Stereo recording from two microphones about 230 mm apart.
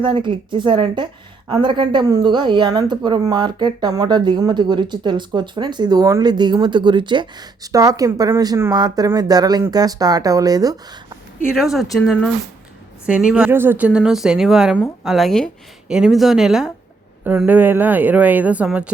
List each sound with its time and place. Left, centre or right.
0.0 s a woman's voice: right
11.4 s speech: centre